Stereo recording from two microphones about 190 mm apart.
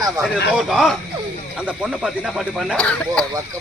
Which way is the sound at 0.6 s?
Centre (ahead or behind).